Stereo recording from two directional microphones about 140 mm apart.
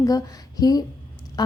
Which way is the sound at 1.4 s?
30° left (ahead or behind).